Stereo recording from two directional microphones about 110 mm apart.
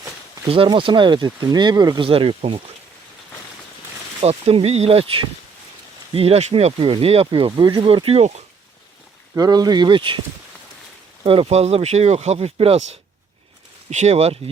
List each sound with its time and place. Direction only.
0.4 s speech: 60° right (ahead or behind); by 2.0 s 40° right (ahead or behind)
2.0 s speech: 60° right (ahead or behind)
4.2 s speech: 70° right (ahead or behind); by 8.4 s 90° right
9.4 s speech: 40° right (ahead or behind)
11.2 s speech: 60° right (ahead or behind)
13.9 s speech: 85° right; by 14.5 s 70° right (ahead or behind)